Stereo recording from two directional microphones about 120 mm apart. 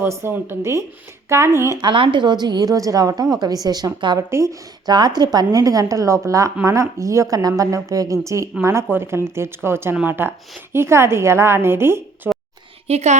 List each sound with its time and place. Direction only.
0.0 s a woman's voice: 20° right (ahead or behind)
1.9 s a woman's voice: 45° right (ahead or behind)
4.2 s a woman's voice: 25° right (ahead or behind)
4.9 s a woman's voice: 35° right (ahead or behind); by 12.3 s 20° right (ahead or behind)
12.9 s a woman's voice: 65° right (ahead or behind)